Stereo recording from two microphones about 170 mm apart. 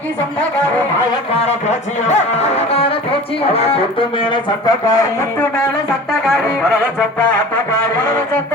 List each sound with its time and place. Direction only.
2.0 s speech: 40° left (ahead or behind); by 5.0 s 25° left (ahead or behind)